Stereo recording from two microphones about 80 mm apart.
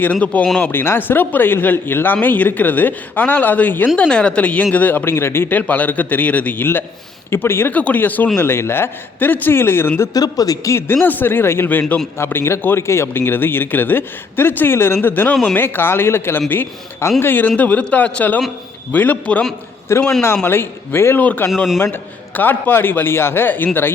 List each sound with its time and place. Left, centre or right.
0.0 s a man's voice: centre
7.7 s a man's voice: centre
10.2 s a man's voice: left
11.0 s a man's voice: left
19.9 s a man's voice: left